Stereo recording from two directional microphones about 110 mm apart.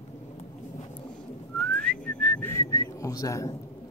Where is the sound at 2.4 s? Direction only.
25° left (ahead or behind).